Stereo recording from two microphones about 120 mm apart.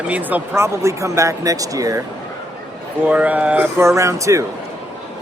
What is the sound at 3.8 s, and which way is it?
Speech, 25° right (ahead or behind).